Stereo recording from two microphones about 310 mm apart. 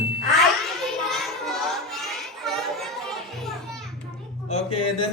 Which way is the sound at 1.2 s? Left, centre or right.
Centre.